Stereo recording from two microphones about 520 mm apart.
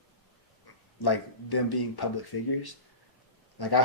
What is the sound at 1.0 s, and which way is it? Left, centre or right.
Speech, left.